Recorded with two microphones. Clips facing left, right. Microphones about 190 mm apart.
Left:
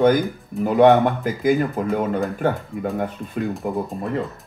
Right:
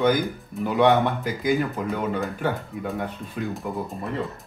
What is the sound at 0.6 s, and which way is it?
Speech, 45° left (ahead or behind).